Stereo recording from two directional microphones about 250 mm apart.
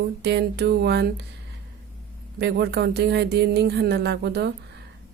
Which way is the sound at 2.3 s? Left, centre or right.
Right.